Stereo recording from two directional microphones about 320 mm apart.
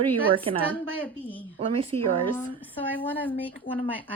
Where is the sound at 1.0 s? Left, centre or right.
Centre.